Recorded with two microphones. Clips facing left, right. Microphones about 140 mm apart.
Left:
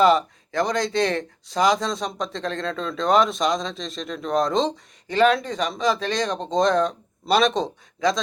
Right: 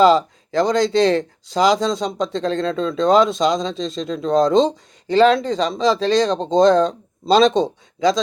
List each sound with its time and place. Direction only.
0.0 s speech: 90° right
0.7 s speech: 30° right (ahead or behind)